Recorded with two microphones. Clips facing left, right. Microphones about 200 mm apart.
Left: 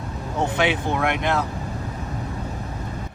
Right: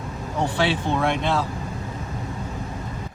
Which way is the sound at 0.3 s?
20° left (ahead or behind).